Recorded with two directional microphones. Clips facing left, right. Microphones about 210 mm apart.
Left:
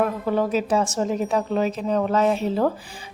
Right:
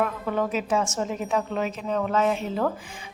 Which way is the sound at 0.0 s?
35° left (ahead or behind).